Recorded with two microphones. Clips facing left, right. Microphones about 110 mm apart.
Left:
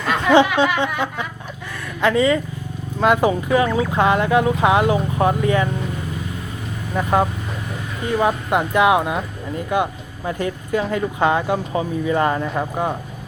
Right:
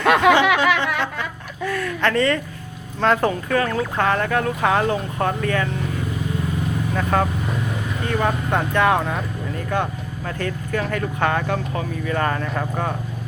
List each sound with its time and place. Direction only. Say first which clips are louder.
0.0 s snicker: right 4 dB; 70° right (ahead or behind)
1.7 s a sound: left 2 dB; 10° left (ahead or behind)
3.0 s speech: left 2 dB; 10° left (ahead or behind)
6.9 s speech: left 4 dB; 15° left (ahead or behind)